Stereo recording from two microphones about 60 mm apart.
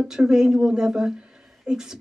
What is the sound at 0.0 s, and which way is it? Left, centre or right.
Speech, centre.